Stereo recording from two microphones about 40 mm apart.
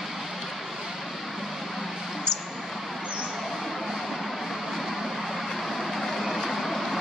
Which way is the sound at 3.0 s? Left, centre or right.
Right.